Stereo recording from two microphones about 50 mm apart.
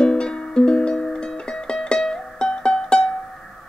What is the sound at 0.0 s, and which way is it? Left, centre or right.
Music, centre.